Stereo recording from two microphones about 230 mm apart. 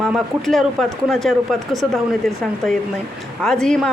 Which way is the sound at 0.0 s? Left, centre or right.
Centre.